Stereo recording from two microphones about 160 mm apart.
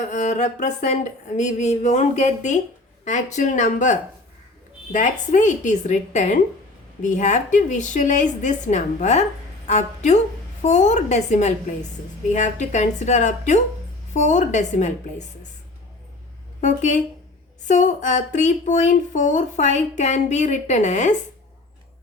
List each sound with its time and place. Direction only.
0.0 s speech: 50° left (ahead or behind)
16.6 s speech: 50° left (ahead or behind)